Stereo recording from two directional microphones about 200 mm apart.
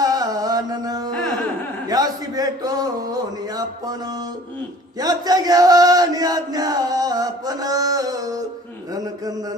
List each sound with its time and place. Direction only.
0.0 s music: 20° right (ahead or behind)
1.9 s a sound: 20° right (ahead or behind)
4.9 s chant: 20° right (ahead or behind)